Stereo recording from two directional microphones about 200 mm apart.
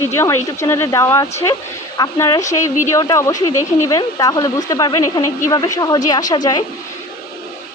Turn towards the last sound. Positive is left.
turn(degrees=20)  # may be behind; listen again after turning